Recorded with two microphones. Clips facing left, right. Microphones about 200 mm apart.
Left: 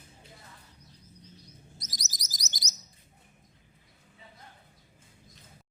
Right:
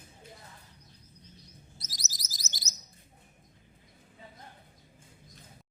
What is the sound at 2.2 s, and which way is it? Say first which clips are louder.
Chirp: left 2 dB; 15° left (ahead or behind).